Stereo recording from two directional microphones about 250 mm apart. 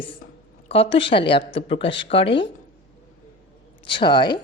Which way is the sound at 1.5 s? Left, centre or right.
Left.